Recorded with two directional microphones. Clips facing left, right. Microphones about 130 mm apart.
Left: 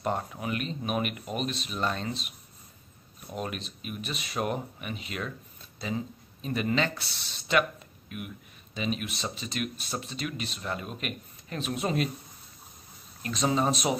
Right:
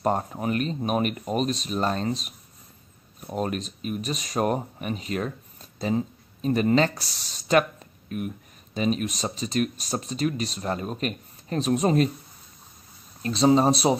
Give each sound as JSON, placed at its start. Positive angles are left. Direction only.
{"t": 0.0, "sound": "speech", "side_deg": -40}
{"t": 13.2, "sound": "speech", "side_deg": -30}